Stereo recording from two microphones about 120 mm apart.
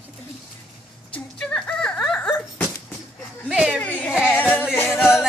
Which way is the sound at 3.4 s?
5° right (ahead or behind).